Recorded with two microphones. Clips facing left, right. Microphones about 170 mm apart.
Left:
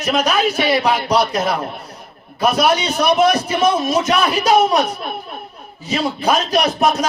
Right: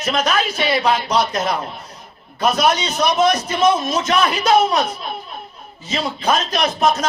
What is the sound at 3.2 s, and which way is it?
A man's voice, 10° left (ahead or behind).